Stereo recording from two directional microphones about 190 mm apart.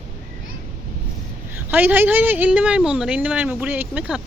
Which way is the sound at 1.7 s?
10° right (ahead or behind).